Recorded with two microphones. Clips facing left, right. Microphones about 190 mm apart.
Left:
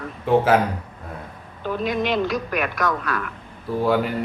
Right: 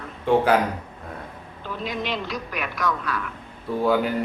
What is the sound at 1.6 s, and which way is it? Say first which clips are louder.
A man's voice: left 6 dB; 50° left (ahead or behind).